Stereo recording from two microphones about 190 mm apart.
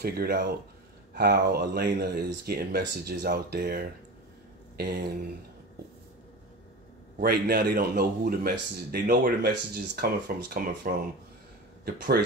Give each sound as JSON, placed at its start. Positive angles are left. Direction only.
{"t": 0.0, "sound": "a man's voice", "side_deg": -55}
{"t": 4.7, "sound": "a sound", "side_deg": -55}
{"t": 7.2, "sound": "a man's voice", "side_deg": -55}